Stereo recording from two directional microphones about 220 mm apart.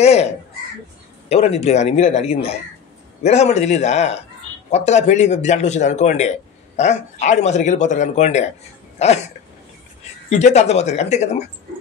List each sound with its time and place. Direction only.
0.0 s a man's voice: 30° left (ahead or behind)
1.3 s a man's voice: 30° left (ahead or behind)
8.9 s a sound: 30° left (ahead or behind)
10.3 s speech: 30° left (ahead or behind)